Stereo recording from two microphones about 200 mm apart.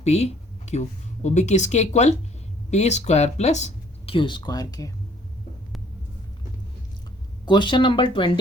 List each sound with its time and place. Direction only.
0.0 s speech: 35° left (ahead or behind); by 4.9 s 20° left (ahead or behind)
7.4 s speech: 20° left (ahead or behind)